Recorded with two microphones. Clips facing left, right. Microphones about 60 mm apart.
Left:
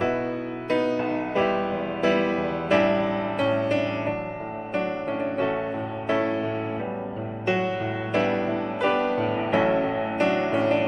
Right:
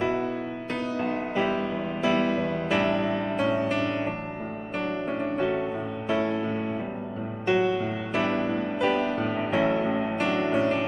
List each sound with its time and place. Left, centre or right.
0.7 s music: left
2.7 s music: centre
8.1 s music: centre